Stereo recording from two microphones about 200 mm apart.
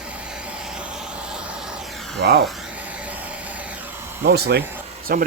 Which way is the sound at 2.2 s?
60° right (ahead or behind).